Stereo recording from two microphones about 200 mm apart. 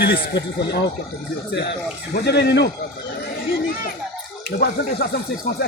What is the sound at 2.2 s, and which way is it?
Speech, 55° left (ahead or behind).